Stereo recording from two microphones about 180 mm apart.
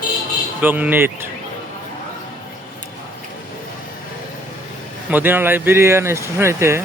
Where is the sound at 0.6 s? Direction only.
10° right (ahead or behind).